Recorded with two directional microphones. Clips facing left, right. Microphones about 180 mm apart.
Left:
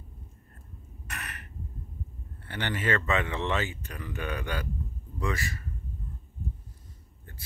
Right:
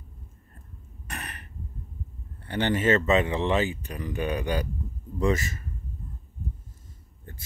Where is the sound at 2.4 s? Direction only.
25° right (ahead or behind).